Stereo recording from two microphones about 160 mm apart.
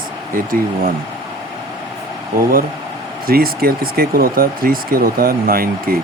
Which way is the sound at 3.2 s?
70° right (ahead or behind).